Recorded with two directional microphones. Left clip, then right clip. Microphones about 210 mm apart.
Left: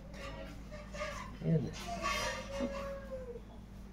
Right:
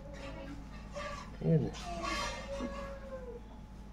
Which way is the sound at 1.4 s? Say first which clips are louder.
Right 4 dB; 35° right (ahead or behind).